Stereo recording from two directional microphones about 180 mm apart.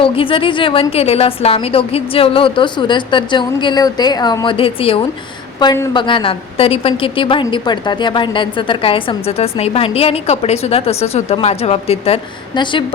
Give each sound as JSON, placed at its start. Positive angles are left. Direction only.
{"t": 0.0, "sound": "a woman's voice", "side_deg": 30}
{"t": 5.5, "sound": "a woman's voice", "side_deg": 20}